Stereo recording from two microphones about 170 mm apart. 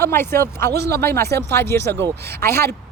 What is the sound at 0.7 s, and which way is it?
Speech, 70° right (ahead or behind).